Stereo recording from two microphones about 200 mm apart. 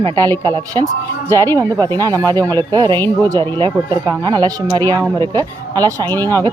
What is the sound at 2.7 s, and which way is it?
Speech, 20° right (ahead or behind).